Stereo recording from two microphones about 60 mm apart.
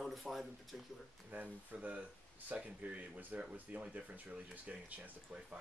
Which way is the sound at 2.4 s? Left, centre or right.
Right.